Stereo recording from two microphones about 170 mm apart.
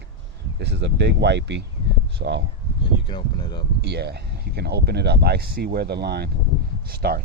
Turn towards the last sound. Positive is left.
turn(degrees=-65)  # may be behind; listen again after turning